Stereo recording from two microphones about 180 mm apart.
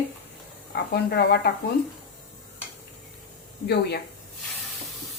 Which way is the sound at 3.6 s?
65° left (ahead or behind).